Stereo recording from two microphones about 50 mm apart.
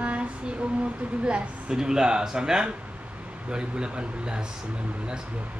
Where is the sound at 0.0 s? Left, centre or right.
Right.